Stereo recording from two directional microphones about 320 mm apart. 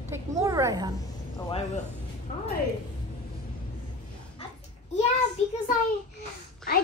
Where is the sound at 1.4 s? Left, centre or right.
Centre.